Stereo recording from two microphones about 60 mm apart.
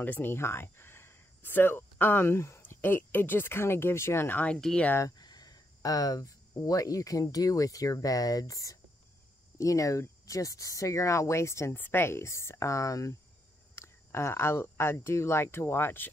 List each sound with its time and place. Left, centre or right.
0.0 s speech: left
4.5 s speech: centre
5.4 s speech: left
11.7 s speech: left
13.7 s speech: left